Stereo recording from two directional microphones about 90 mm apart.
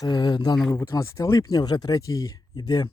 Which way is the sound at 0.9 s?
35° left (ahead or behind).